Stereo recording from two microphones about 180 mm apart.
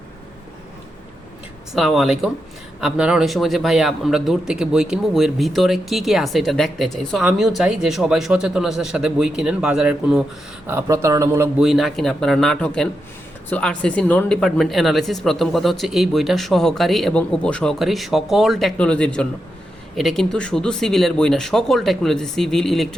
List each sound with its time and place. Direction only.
1.7 s speech: centre (ahead or behind)
10.7 s a man's voice: 15° right (ahead or behind)
11.6 s speech: centre (ahead or behind)